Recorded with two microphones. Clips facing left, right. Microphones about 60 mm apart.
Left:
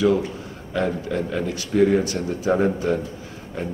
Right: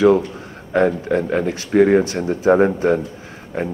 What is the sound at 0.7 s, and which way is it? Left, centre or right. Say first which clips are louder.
A man's voice: right 7 dB; right.